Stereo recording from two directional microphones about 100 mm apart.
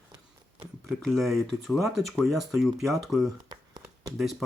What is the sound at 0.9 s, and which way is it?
Speech, centre (ahead or behind).